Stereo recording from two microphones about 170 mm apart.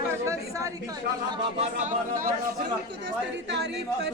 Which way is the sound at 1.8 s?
50° right (ahead or behind).